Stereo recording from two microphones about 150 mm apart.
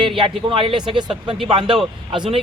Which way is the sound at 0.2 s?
35° right (ahead or behind).